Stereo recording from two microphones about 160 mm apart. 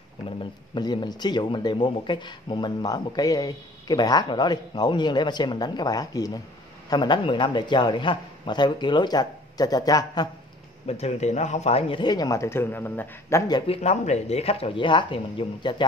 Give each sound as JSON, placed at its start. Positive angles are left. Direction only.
{"t": 0.4, "sound": "speech", "side_deg": 30}
{"t": 10.9, "sound": "speech", "side_deg": 40}
{"t": 13.5, "sound": "speech", "side_deg": 25}
{"t": 13.7, "sound": "speech", "side_deg": 45}